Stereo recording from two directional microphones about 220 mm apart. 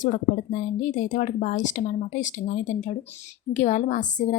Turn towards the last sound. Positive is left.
turn(degrees=35)  # may be behind; listen again after turning